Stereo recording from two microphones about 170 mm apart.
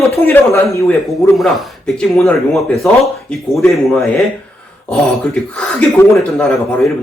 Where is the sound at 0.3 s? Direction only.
15° left (ahead or behind).